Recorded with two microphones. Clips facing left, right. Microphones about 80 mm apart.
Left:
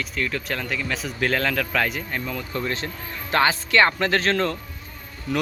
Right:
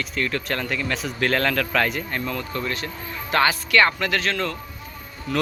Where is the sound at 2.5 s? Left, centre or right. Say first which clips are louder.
Even; left.